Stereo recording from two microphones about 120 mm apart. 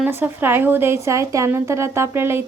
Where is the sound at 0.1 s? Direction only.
20° right (ahead or behind).